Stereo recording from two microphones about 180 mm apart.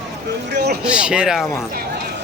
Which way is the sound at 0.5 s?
65° right (ahead or behind).